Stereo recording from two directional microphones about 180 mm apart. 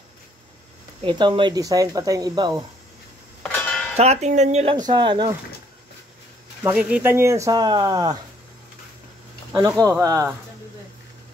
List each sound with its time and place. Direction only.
1.0 s speech: 25° right (ahead or behind)
3.4 s a sound: 10° left (ahead or behind)
3.9 s speech: 35° right (ahead or behind)
4.8 s speech: 25° right (ahead or behind)
6.6 s speech: 5° right (ahead or behind)
9.5 s speech: 20° right (ahead or behind)